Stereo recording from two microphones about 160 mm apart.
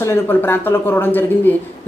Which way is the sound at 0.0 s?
15° left (ahead or behind).